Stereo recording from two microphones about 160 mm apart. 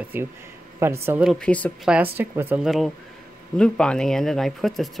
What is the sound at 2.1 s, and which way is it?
Speech, 10° right (ahead or behind).